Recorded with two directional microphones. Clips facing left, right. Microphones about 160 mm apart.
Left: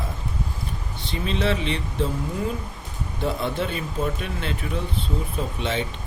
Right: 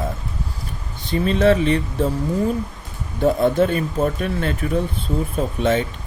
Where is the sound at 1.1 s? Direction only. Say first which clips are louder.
Right 9 dB; 45° right (ahead or behind).